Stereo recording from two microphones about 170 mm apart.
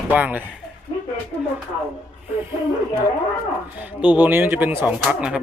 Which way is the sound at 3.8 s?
10° right (ahead or behind).